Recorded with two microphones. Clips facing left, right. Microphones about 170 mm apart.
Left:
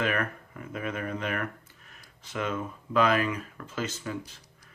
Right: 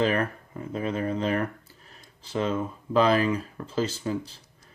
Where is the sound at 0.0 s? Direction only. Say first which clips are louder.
Right 5 dB; 30° right (ahead or behind).